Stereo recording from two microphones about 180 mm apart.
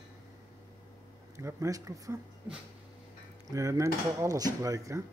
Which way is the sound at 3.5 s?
20° right (ahead or behind).